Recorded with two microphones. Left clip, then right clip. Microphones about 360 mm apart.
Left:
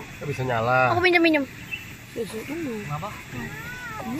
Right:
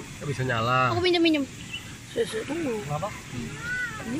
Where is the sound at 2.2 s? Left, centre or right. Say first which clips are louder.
Right 4 dB; right.